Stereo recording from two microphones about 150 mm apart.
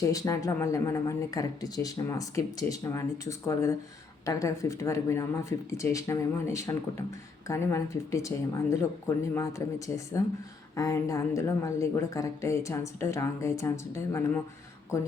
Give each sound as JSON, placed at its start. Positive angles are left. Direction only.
{"t": 0.0, "sound": "speech", "side_deg": 20}